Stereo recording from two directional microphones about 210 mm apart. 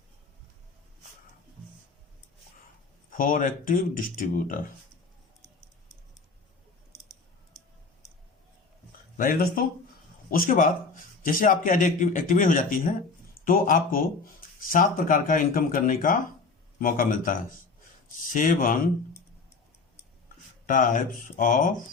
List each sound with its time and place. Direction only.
3.1 s a man's voice: 40° left (ahead or behind)
9.1 s a man's voice: 40° left (ahead or behind)
20.7 s a man's voice: 40° left (ahead or behind)